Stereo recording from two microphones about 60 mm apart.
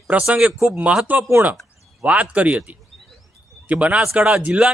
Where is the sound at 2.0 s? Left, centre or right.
Right.